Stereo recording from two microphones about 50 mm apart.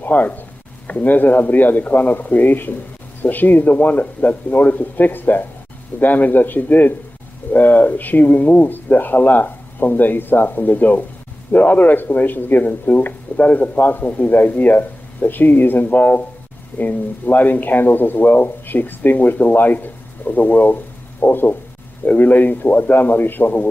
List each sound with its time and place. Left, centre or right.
0.0 s speech: left